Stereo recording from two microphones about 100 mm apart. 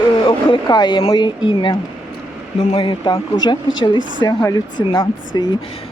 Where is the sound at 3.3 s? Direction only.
50° left (ahead or behind).